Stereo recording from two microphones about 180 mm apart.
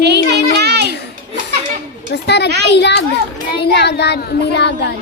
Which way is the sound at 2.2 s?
70° left (ahead or behind).